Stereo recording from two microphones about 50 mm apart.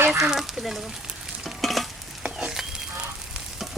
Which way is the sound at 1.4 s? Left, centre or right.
Centre.